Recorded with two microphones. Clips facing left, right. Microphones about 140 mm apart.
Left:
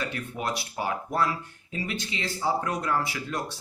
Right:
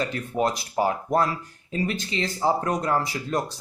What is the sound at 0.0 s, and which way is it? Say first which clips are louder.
Speech: right 7 dB; 35° right (ahead or behind).